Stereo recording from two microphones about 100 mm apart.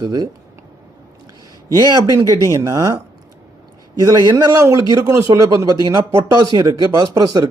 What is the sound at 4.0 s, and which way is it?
A man's voice, 40° right (ahead or behind).